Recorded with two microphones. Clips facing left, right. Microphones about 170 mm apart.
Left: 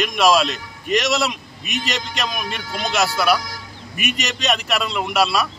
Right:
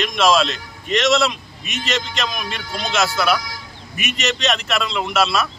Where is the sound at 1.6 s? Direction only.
45° left (ahead or behind).